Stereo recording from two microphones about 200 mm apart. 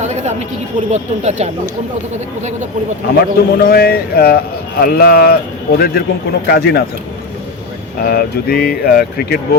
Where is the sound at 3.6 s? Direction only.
50° left (ahead or behind).